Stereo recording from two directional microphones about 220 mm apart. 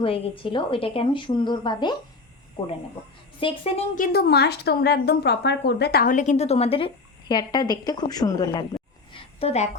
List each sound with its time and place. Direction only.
0.0 s a woman's voice: 25° left (ahead or behind)